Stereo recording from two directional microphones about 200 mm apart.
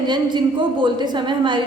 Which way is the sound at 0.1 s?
20° right (ahead or behind).